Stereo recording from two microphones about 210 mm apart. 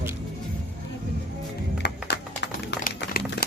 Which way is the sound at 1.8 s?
55° left (ahead or behind).